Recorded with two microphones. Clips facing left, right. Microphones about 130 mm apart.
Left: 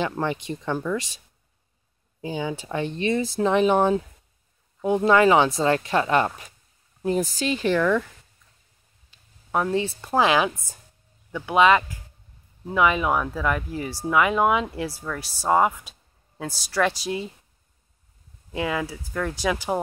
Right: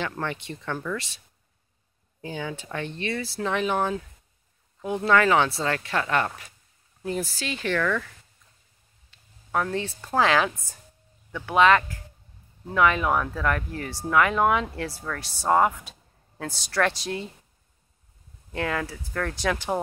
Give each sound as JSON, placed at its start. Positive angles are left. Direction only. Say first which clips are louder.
{"t": 0.0, "sound": "speech", "louder": "left 5 dB", "side_deg": 15}
{"t": 2.2, "sound": "speech", "louder": "left 4 dB", "side_deg": 15}
{"t": 9.5, "sound": "speech", "louder": "left 3 dB", "side_deg": 15}
{"t": 18.5, "sound": "speech", "louder": "left 2 dB", "side_deg": 10}